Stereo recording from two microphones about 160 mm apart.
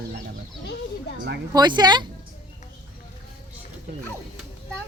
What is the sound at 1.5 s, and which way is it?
Speech, 25° right (ahead or behind).